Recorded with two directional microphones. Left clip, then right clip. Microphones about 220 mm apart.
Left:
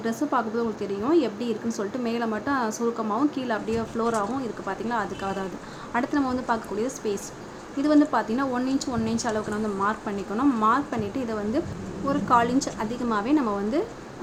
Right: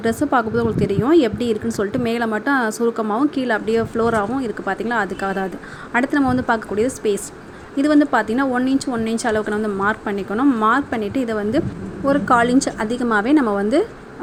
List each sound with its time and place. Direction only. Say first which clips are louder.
0.0 s a woman's voice: right 8 dB; 25° right (ahead or behind)